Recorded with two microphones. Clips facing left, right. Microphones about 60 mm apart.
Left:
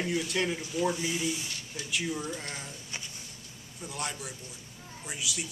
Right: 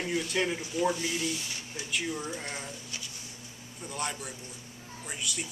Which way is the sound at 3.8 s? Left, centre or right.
Centre.